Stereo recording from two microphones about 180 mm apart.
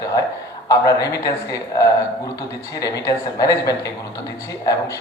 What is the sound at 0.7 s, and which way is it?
Speech, 20° left (ahead or behind).